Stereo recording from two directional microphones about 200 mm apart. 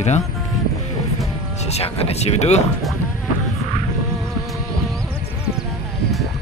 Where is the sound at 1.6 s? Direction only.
30° left (ahead or behind).